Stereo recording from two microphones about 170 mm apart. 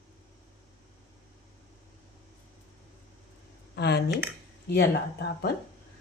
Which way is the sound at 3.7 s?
75° left (ahead or behind).